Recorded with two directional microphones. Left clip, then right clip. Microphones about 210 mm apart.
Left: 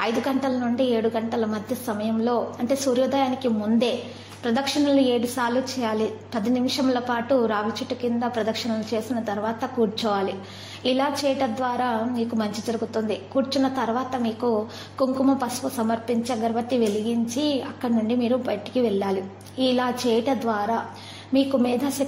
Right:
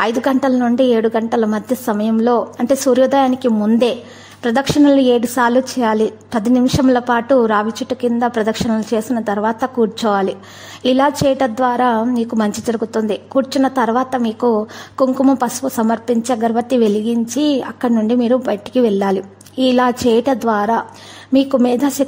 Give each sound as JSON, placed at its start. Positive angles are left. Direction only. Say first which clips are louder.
{"t": 0.0, "sound": "a woman's voice", "louder": "right 9 dB", "side_deg": -45}